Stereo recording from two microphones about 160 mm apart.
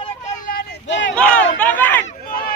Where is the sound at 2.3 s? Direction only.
65° left (ahead or behind).